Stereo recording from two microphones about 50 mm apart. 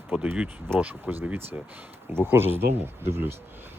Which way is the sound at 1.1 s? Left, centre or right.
Right.